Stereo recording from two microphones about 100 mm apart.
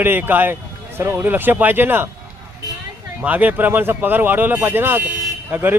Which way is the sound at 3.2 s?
15° right (ahead or behind).